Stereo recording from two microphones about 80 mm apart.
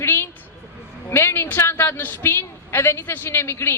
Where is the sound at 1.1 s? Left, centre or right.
Left.